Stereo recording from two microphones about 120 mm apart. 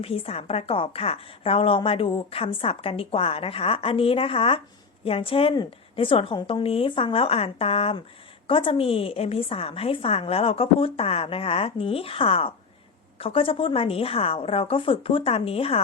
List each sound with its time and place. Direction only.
0.0 s a woman's voice: 55° left (ahead or behind)